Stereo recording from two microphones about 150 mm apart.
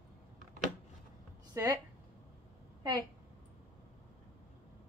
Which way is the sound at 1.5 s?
25° right (ahead or behind).